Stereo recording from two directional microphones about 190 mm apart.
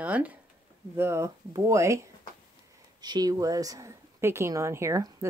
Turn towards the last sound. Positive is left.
turn(degrees=-15)  # may be behind; listen again after turning